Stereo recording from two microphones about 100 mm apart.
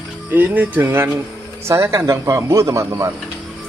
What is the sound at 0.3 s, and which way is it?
A man's voice, 20° right (ahead or behind).